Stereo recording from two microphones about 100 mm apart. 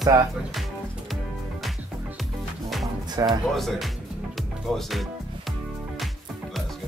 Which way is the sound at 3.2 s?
35° right (ahead or behind).